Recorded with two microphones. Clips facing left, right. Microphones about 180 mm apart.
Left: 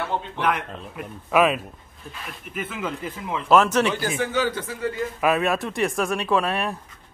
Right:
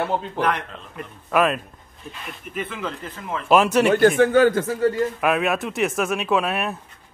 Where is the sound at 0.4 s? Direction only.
5° left (ahead or behind).